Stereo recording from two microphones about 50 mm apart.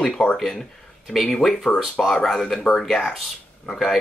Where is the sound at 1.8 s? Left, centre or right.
Centre.